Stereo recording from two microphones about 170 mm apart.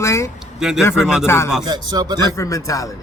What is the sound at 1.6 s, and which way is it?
Mantra, 25° right (ahead or behind).